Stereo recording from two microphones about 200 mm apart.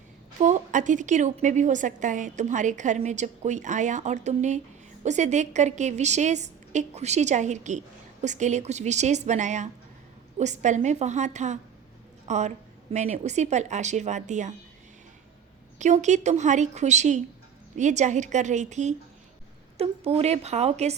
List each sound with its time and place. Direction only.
0.3 s a woman's voice: 40° right (ahead or behind)
15.8 s a woman's voice: 35° right (ahead or behind)